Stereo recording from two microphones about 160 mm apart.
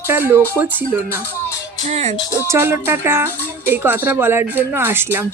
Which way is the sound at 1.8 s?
45° right (ahead or behind).